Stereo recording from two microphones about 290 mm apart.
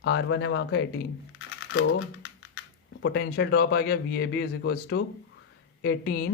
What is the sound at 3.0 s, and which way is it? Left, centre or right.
Speech, left.